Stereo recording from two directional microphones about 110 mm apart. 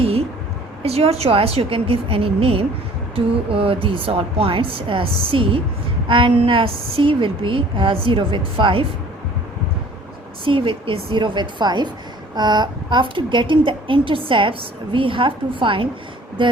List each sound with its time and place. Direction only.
0.0 s a sound: 65° right (ahead or behind)
0.8 s a woman's voice: 65° right (ahead or behind)
10.4 s a woman's voice: 50° right (ahead or behind)